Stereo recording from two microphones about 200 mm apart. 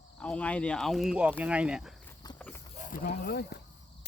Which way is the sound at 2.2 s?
20° left (ahead or behind).